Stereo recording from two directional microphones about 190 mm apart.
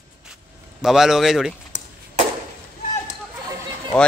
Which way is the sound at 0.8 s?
Centre (ahead or behind).